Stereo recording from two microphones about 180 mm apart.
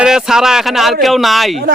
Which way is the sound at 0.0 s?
5° right (ahead or behind).